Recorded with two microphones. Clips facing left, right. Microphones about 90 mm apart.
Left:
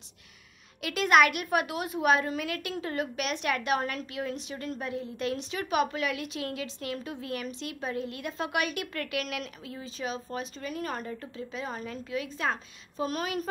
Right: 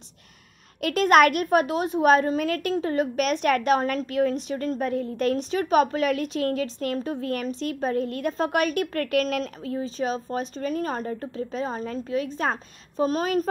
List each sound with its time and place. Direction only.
0.7 s a woman's voice: 45° right (ahead or behind)